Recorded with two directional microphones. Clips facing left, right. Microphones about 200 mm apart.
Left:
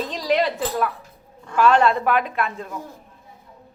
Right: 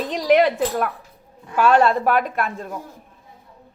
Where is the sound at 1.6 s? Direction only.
40° right (ahead or behind).